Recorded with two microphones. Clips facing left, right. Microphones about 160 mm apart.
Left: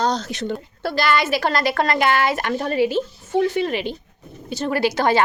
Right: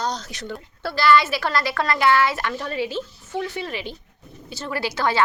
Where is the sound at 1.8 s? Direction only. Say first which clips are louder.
Right 3 dB; 50° left (ahead or behind).